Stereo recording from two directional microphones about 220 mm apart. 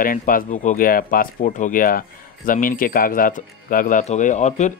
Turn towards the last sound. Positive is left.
turn(degrees=30)  # may be behind; listen again after turning